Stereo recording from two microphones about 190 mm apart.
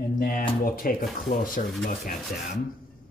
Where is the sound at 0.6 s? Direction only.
50° left (ahead or behind).